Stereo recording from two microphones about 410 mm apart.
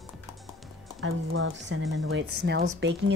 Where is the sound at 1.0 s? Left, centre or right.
Right.